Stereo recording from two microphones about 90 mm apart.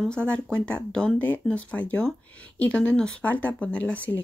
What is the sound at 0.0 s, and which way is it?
Speech, 10° left (ahead or behind).